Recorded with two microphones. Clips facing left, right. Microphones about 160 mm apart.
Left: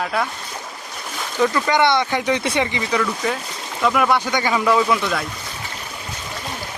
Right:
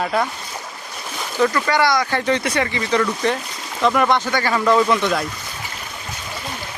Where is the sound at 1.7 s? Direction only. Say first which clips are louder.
Left 1 dB; 20° left (ahead or behind).